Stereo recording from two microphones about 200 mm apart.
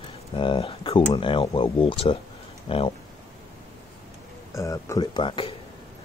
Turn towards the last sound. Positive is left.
turn(degrees=25)  # may be behind; listen again after turning